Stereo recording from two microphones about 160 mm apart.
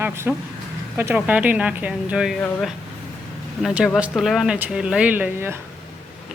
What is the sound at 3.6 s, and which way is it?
Speech, 5° right (ahead or behind).